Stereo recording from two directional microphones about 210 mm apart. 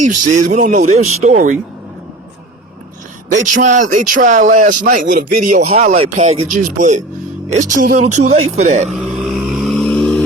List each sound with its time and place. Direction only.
0.0 s a man's voice: 35° right (ahead or behind)
3.3 s a man's voice: 35° right (ahead or behind)
8.9 s vehicle: centre (ahead or behind)